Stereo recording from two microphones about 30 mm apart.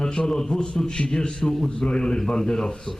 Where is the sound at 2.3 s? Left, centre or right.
Left.